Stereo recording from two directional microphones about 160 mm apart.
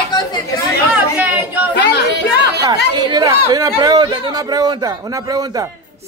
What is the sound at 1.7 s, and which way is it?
Speech, 90° left.